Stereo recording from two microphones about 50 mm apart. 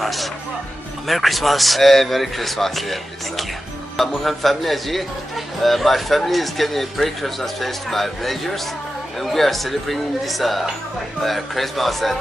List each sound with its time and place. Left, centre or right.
0.0 s speech: centre